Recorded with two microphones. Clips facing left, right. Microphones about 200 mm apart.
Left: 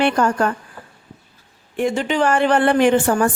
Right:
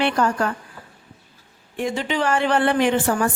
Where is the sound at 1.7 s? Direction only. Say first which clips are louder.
Left 4 dB; 50° left (ahead or behind).